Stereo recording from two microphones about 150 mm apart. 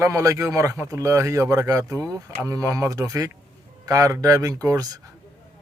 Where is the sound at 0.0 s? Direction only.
20° right (ahead or behind).